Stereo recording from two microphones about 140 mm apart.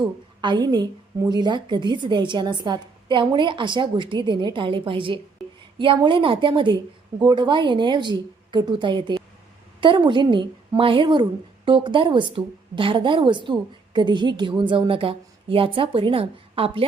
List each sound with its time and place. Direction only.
0.0 s a woman's voice: 30° right (ahead or behind)